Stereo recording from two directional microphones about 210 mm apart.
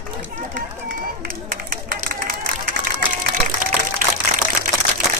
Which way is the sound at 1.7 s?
45° right (ahead or behind).